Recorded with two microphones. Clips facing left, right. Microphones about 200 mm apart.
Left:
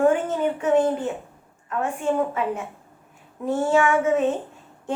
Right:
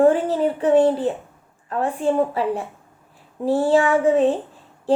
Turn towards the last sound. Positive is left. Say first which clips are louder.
# right 4 dB
turn(degrees=-35)  # may be behind; listen again after turning